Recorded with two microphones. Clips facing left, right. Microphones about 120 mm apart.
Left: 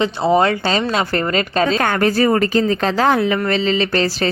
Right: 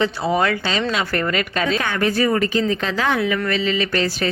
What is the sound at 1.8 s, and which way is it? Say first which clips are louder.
A woman's voice: left 4 dB; 45° left (ahead or behind).